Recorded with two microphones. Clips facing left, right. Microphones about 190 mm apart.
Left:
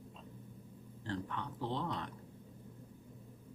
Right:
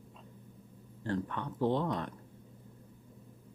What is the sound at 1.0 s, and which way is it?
Speech, 50° right (ahead or behind).